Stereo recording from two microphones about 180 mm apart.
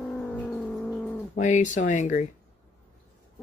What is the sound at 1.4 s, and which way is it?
Speech, 45° left (ahead or behind).